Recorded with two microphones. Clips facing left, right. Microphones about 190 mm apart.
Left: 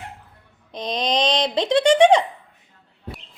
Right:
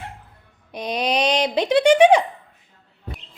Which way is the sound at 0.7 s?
10° right (ahead or behind).